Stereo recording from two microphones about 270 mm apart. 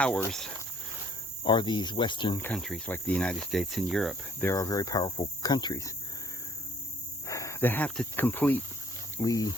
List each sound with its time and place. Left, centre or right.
0.0 s speech: centre
1.5 s speech: centre
7.3 s speech: centre